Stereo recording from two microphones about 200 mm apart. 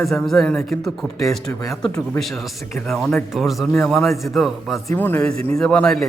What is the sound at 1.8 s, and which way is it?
A man's voice, 5° left (ahead or behind).